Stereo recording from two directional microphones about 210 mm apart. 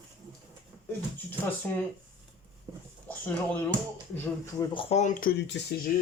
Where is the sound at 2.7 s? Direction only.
15° right (ahead or behind).